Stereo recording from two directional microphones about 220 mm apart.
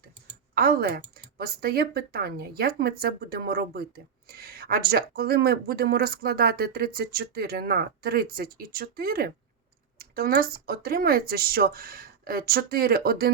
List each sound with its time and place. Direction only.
0.5 s speech: 45° right (ahead or behind)